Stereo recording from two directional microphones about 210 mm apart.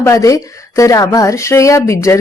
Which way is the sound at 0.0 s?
15° left (ahead or behind).